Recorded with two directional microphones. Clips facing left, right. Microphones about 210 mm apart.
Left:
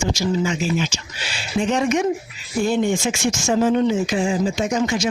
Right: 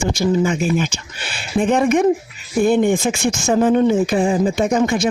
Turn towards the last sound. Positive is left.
turn(degrees=-55)  # may be behind; listen again after turning